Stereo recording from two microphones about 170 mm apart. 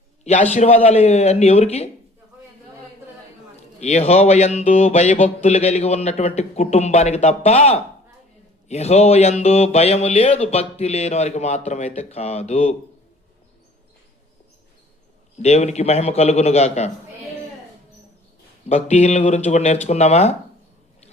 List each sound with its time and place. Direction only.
0.5 s speech: 40° left (ahead or behind)
3.8 s speech: 40° left (ahead or behind)
15.4 s speech: 40° left (ahead or behind)
18.7 s speech: 40° left (ahead or behind)